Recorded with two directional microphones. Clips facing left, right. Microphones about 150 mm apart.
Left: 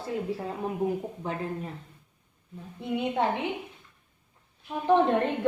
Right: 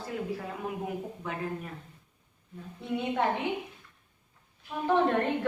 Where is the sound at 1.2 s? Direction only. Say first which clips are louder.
Left 2 dB; 30° left (ahead or behind).